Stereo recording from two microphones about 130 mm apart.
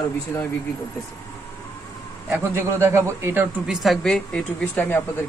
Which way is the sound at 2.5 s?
20° right (ahead or behind).